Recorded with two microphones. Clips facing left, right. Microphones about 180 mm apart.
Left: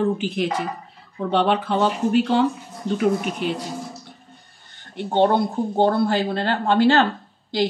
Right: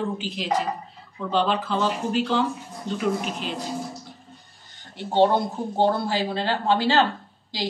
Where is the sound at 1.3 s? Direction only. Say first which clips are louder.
Left 3 dB; 65° left (ahead or behind).